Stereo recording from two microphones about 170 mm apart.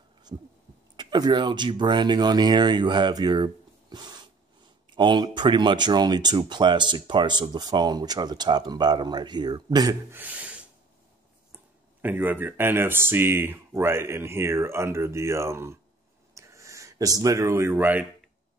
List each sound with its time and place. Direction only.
0.3 s speech: 25° right (ahead or behind)
10.1 s speech: 10° right (ahead or behind)
12.0 s speech: 10° right (ahead or behind)
16.3 s a sound: 15° right (ahead or behind)